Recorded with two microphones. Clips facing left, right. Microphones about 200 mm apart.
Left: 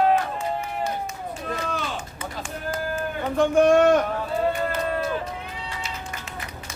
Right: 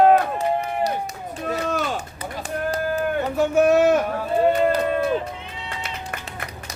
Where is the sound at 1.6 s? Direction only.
40° right (ahead or behind).